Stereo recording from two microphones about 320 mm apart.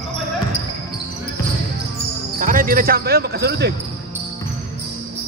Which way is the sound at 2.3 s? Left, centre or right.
Right.